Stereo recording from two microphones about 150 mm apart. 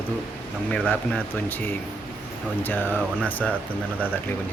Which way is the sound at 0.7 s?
10° left (ahead or behind).